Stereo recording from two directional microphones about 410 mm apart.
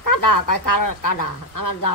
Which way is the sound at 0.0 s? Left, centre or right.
Left.